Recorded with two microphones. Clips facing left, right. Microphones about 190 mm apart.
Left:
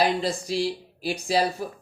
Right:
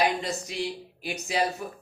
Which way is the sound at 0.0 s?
30° left (ahead or behind).